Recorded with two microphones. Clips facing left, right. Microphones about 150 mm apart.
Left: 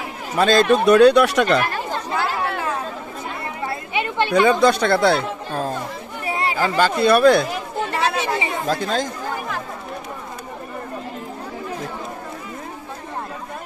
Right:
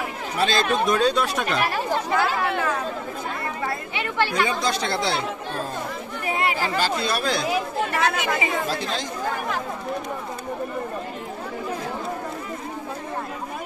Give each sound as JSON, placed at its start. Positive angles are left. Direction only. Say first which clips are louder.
{"t": 0.4, "sound": "speech", "louder": "left 7 dB", "side_deg": 50}
{"t": 0.8, "sound": "speech", "louder": "left 9 dB", "side_deg": 70}
{"t": 1.7, "sound": "chatter", "louder": "right 2 dB", "side_deg": -10}
{"t": 3.6, "sound": "chatter", "louder": "left 6 dB", "side_deg": 20}
{"t": 4.5, "sound": "speech", "louder": "left 9 dB", "side_deg": 60}
{"t": 6.2, "sound": "chatter", "louder": "left 1 dB", "side_deg": 30}
{"t": 6.6, "sound": "speech", "louder": "left 6 dB", "side_deg": 55}
{"t": 7.9, "sound": "chatter", "louder": "left 3 dB", "side_deg": 30}
{"t": 8.6, "sound": "speech", "louder": "left 6 dB", "side_deg": 45}